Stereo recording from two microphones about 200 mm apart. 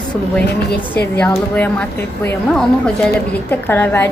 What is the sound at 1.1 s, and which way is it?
A woman's voice, 10° left (ahead or behind).